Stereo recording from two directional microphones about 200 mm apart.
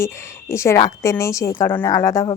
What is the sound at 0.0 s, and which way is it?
Speech, 15° left (ahead or behind).